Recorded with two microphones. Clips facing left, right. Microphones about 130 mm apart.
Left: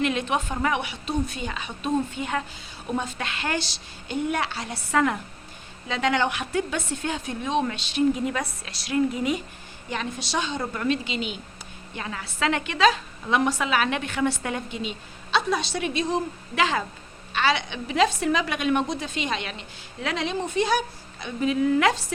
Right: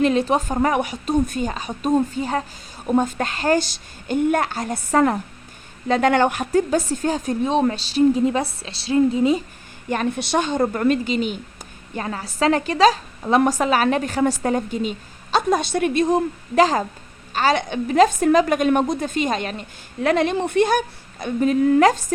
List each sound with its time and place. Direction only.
0.0 s a woman's voice: 35° right (ahead or behind)
9.9 s a woman's voice: 55° right (ahead or behind)